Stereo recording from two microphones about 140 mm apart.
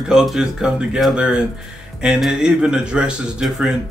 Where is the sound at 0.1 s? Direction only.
5° right (ahead or behind).